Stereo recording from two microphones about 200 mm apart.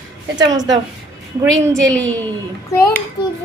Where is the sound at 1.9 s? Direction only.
5° left (ahead or behind).